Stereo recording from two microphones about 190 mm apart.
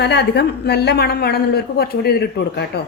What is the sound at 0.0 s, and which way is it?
Speech, 60° left (ahead or behind).